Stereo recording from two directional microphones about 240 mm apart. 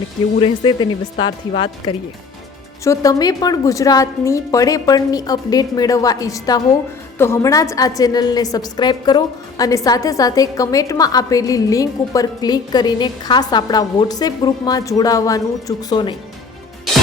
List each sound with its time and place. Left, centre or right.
0.3 s a woman's voice: left